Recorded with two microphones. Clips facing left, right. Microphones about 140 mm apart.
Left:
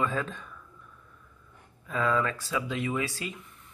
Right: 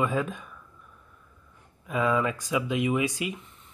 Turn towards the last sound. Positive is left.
turn(degrees=-15)  # may be behind; listen again after turning